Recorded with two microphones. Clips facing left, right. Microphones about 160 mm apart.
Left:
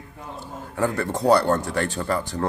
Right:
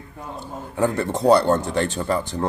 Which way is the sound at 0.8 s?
20° right (ahead or behind).